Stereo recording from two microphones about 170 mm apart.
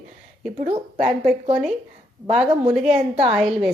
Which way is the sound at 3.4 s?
Centre (ahead or behind).